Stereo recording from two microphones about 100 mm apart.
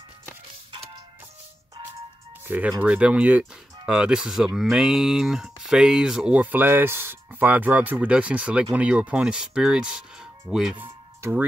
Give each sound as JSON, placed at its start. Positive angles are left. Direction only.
{"t": 2.4, "sound": "speech", "side_deg": -20}
{"t": 10.8, "sound": "music", "side_deg": -20}